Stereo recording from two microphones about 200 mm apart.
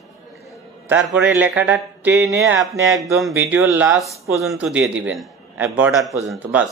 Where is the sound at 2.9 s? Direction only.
Centre (ahead or behind).